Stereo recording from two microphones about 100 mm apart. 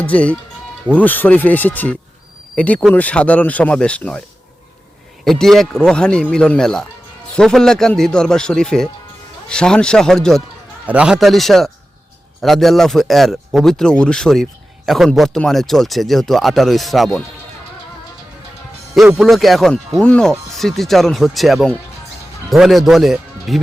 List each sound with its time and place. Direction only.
0.0 s speech: 15° left (ahead or behind)
5.2 s a man's voice: 5° left (ahead or behind)
10.8 s a man's voice: 10° right (ahead or behind)
19.1 s a man's voice: centre (ahead or behind)
20.0 s a man's voice: 10° left (ahead or behind)